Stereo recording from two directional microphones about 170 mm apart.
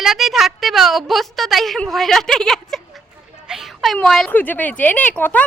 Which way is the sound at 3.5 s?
Centre (ahead or behind).